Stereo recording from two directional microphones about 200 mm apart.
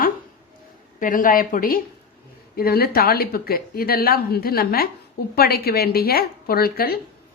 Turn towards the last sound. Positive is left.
turn(degrees=50)  # may be behind; listen again after turning